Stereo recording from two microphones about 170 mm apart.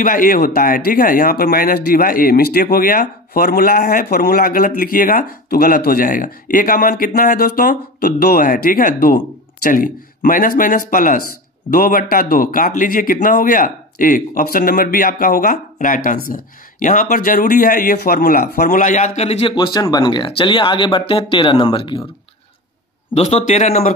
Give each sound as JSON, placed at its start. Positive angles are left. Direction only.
{"t": 0.0, "sound": "a man's voice", "side_deg": 55}
{"t": 19.5, "sound": "speech", "side_deg": 25}
{"t": 23.1, "sound": "a man's voice", "side_deg": 40}